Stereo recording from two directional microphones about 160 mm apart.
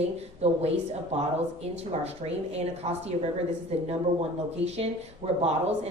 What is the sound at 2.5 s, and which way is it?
Speech, 40° right (ahead or behind).